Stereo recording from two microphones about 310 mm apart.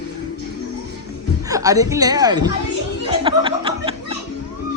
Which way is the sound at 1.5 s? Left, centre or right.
Centre.